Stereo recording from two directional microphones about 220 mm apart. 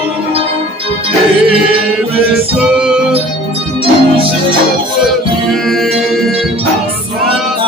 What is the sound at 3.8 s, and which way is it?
Music, 25° right (ahead or behind).